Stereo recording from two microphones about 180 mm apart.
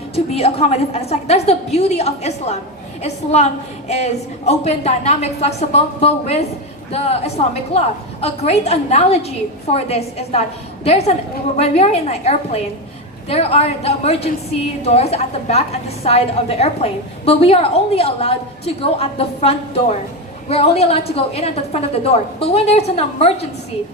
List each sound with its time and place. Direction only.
0.3 s a woman's voice: 35° left (ahead or behind)